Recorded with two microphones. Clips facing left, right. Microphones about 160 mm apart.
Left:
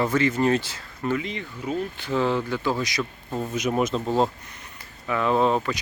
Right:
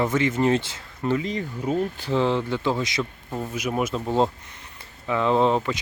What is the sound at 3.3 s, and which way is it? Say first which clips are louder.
Speech: left 3 dB; 5° right (ahead or behind).